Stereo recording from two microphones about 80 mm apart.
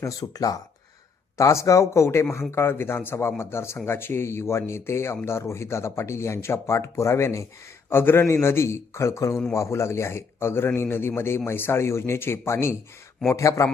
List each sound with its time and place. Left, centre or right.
0.0 s a man's voice: left